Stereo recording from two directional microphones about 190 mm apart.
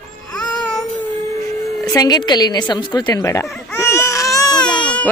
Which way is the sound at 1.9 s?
20° left (ahead or behind).